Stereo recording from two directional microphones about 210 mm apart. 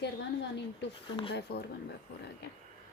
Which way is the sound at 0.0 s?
55° left (ahead or behind).